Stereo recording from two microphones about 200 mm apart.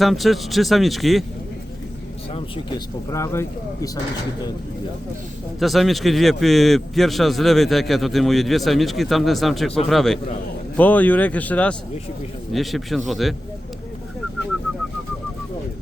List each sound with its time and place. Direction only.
0.0 s a man's voice: centre (ahead or behind)
2.3 s speech: 20° left (ahead or behind)
5.5 s a man's voice: centre (ahead or behind)